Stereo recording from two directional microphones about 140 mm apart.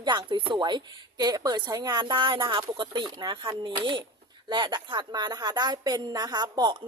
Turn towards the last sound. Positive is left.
turn(degrees=-30)  # may be behind; listen again after turning